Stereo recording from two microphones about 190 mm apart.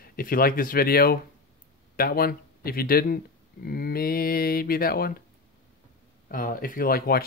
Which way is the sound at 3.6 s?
55° left (ahead or behind).